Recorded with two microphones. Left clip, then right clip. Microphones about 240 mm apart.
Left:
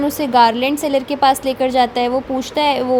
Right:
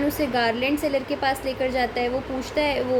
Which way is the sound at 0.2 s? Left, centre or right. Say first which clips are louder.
Left 13 dB; left.